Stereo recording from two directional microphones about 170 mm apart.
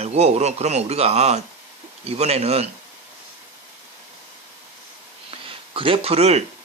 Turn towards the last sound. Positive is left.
turn(degrees=-40)  # may be behind; listen again after turning